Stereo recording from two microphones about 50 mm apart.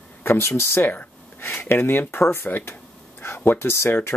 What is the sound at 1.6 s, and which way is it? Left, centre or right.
Speech, left.